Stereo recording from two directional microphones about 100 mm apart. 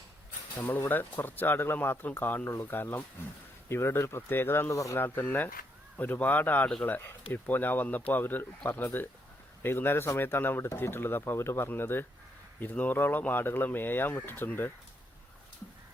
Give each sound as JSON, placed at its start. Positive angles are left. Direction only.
{"t": 0.6, "sound": "speech", "side_deg": 20}
{"t": 4.9, "sound": "speech", "side_deg": 20}